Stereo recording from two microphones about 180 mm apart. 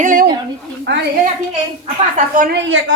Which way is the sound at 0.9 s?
80° right.